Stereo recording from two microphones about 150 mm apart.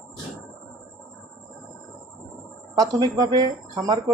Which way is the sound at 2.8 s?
25° right (ahead or behind).